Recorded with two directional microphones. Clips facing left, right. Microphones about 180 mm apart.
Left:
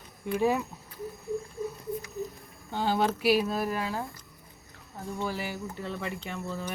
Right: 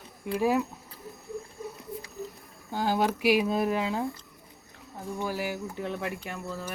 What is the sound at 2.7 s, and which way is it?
Speech, 10° right (ahead or behind).